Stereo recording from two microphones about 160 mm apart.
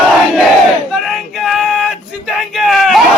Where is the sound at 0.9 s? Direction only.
Centre (ahead or behind).